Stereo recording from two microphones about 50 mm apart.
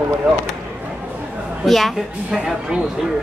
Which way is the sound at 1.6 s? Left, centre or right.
Centre.